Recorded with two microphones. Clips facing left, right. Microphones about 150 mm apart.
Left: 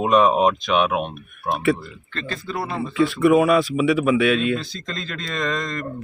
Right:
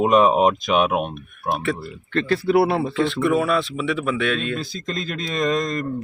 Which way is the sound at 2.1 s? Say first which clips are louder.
Right 11 dB; 70° right (ahead or behind).